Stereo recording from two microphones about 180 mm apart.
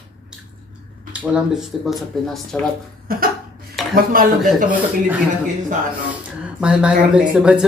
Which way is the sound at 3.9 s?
50° right (ahead or behind).